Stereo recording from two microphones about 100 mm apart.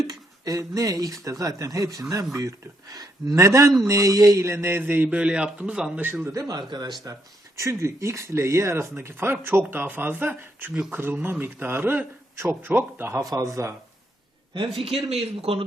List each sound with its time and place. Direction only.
0.1 s speech: 35° right (ahead or behind); by 5.9 s 10° right (ahead or behind)
6.5 s speech: 45° right (ahead or behind)
7.1 s speech: 30° right (ahead or behind)
10.7 s speech: 5° right (ahead or behind)
10.9 s speech: 20° right (ahead or behind)
14.8 s speech: 85° right